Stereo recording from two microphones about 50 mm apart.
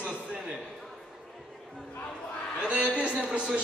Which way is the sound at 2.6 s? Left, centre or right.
Right.